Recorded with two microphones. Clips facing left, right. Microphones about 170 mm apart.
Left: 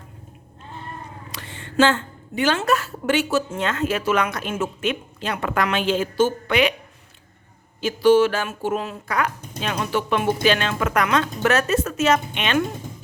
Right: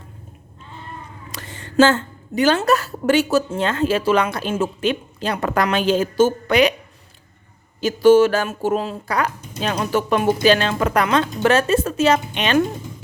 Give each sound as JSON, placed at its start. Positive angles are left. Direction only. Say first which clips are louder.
{"t": 1.3, "sound": "a woman's voice", "louder": "right 1 dB", "side_deg": -40}
{"t": 7.8, "sound": "a woman's voice", "louder": "right 3 dB", "side_deg": -45}